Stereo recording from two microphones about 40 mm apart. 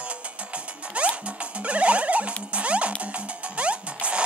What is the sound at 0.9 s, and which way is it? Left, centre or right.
Music, right.